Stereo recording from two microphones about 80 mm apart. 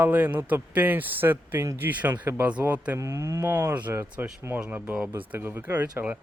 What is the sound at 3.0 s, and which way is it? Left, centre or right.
Speech, right.